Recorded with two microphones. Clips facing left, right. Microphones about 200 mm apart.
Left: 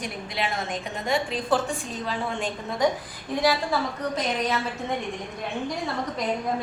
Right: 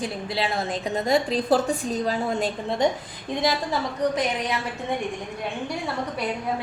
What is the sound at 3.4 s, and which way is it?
A woman's voice, 15° right (ahead or behind).